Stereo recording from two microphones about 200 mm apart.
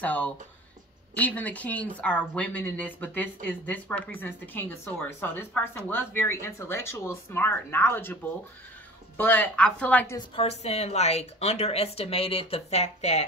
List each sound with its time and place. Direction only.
0.0 s speech: 5° left (ahead or behind)
10.1 s speech: 30° left (ahead or behind)